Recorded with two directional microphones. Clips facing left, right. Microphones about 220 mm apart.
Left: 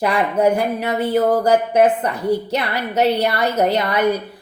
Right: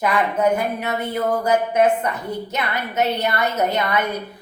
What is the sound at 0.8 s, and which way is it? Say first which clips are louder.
A woman's voice: left 6 dB; 35° left (ahead or behind).